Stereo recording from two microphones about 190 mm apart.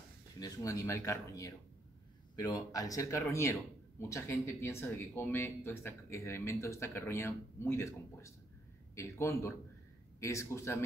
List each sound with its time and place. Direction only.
0.4 s speech: 15° left (ahead or behind)